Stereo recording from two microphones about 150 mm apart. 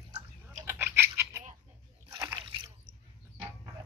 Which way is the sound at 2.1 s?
30° right (ahead or behind).